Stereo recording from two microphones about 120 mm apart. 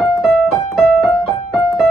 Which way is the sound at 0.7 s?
Centre (ahead or behind).